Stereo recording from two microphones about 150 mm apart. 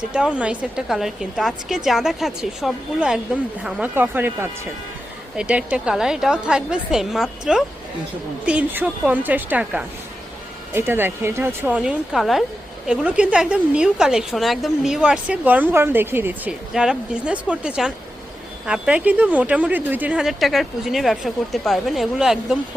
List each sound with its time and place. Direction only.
0.1 s a woman's voice: 5° right (ahead or behind)
11.8 s a woman's voice: 5° right (ahead or behind)